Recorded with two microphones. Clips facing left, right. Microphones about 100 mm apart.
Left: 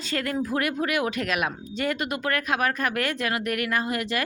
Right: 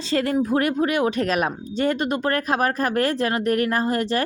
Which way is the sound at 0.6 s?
30° right (ahead or behind).